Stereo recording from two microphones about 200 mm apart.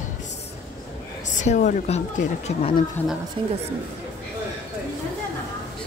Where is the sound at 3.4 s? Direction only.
30° right (ahead or behind).